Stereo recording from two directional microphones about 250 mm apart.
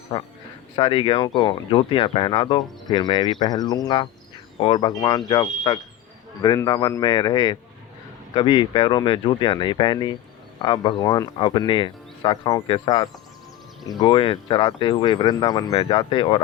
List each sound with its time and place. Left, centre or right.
0.8 s speech: centre